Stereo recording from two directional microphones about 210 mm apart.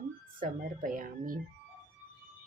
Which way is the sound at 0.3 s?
40° right (ahead or behind).